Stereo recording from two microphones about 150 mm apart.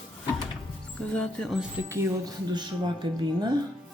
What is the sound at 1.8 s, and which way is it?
Speech, 20° right (ahead or behind).